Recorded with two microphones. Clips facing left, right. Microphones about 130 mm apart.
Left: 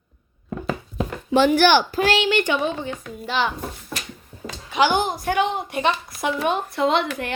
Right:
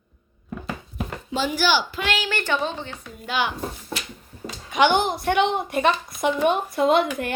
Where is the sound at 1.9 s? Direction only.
35° left (ahead or behind).